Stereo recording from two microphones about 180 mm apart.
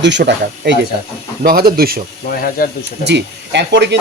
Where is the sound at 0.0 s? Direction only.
80° right.